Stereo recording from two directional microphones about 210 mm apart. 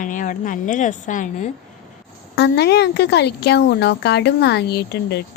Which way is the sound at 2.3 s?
50° left (ahead or behind).